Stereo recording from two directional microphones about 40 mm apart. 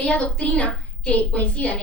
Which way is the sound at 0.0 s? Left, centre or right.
Left.